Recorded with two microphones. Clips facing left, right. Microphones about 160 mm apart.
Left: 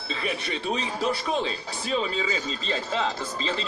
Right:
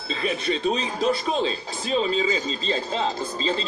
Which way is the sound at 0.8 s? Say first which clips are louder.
Right 4 dB; 20° right (ahead or behind).